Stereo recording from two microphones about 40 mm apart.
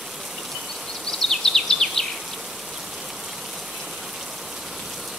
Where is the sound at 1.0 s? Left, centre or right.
Centre.